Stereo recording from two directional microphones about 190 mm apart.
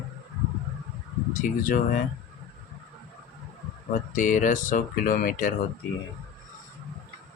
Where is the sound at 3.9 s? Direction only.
45° left (ahead or behind).